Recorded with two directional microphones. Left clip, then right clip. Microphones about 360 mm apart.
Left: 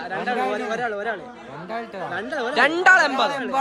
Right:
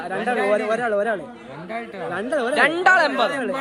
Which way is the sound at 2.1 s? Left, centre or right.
Centre.